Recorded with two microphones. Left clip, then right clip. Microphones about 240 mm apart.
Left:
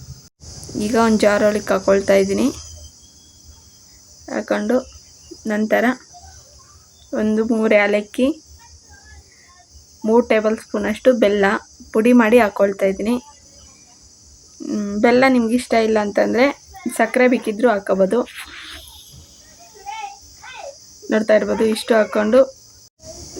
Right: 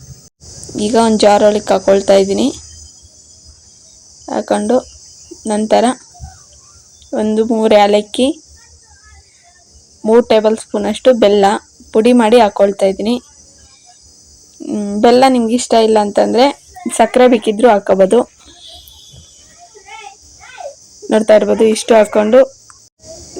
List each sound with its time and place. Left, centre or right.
0.8 s speech: centre
4.3 s cricket: centre
5.4 s speech: centre
7.1 s speech: centre
10.0 s speech: centre
14.6 s speech: centre
21.1 s speech: centre